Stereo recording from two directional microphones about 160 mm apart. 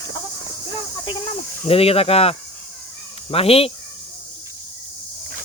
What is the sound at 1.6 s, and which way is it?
Speech, 40° left (ahead or behind).